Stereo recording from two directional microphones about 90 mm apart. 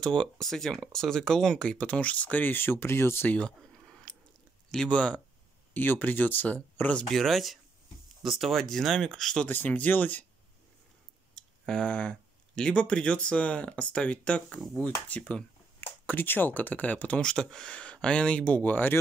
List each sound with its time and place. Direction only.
0.0 s speech: 5° left (ahead or behind); by 3.3 s 25° left (ahead or behind)
4.6 s speech: 10° left (ahead or behind)
9.5 s speech: 20° left (ahead or behind)
11.3 s speech: 10° left (ahead or behind)